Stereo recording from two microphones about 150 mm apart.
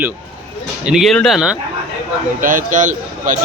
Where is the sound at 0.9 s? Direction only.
Centre (ahead or behind).